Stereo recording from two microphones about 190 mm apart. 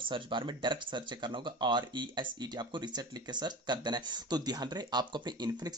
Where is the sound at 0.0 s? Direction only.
25° right (ahead or behind).